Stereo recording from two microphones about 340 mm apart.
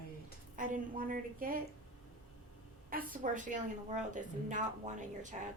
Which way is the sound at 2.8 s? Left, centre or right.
Right.